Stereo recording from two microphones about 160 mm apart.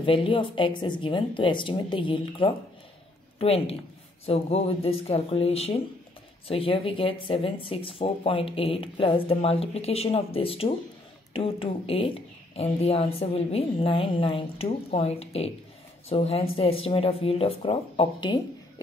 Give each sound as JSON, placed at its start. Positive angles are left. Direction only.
{"t": 0.0, "sound": "a woman's voice", "side_deg": 35}